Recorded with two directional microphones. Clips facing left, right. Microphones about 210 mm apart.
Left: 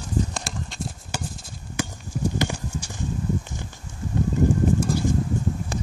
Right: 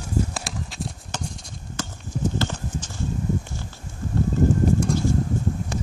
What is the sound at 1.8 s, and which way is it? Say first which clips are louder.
Clip-clop: left 2 dB; 15° left (ahead or behind).